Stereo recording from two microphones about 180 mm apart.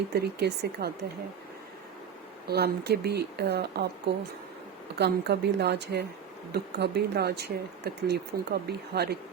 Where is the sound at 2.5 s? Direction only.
65° right (ahead or behind).